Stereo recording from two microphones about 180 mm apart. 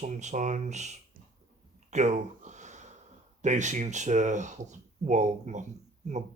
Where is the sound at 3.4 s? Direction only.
40° right (ahead or behind).